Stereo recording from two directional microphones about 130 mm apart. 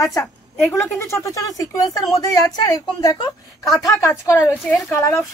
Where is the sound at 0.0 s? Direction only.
25° left (ahead or behind).